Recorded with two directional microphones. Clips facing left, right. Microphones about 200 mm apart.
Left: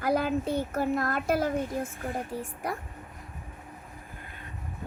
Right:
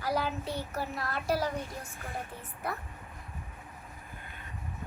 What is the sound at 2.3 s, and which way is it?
Speech, 40° left (ahead or behind).